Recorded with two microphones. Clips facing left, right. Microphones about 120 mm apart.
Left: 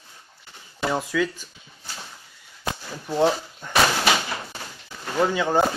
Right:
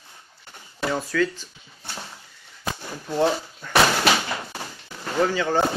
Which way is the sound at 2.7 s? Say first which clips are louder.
Even; 10° left (ahead or behind).